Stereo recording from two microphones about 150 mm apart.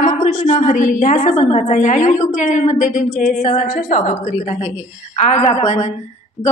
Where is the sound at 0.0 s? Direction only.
55° left (ahead or behind).